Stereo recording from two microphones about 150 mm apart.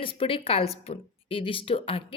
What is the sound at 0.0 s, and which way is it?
Speech, 35° left (ahead or behind).